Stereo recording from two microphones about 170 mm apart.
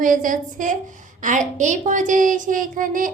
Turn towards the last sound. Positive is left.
turn(degrees=-50)  # may be behind; listen again after turning